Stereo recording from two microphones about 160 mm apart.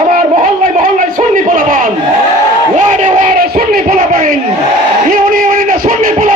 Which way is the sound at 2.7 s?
50° right (ahead or behind).